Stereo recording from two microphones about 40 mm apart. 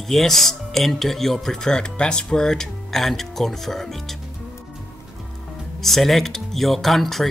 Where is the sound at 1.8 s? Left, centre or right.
Left; by 4.0 s centre.